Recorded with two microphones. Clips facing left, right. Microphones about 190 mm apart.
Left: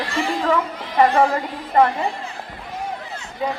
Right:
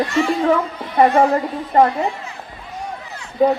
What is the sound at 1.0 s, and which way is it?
Speech, 35° right (ahead or behind).